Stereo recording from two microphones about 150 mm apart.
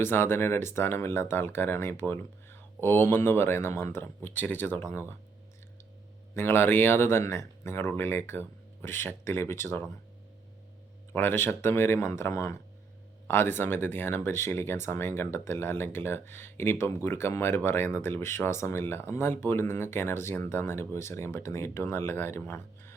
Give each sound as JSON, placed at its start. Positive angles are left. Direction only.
{"t": 0.0, "sound": "speech", "side_deg": 15}
{"t": 6.3, "sound": "speech", "side_deg": 15}
{"t": 11.1, "sound": "speech", "side_deg": 15}